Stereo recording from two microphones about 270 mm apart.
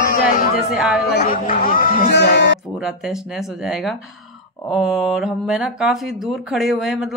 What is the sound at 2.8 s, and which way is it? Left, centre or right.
Speech, centre.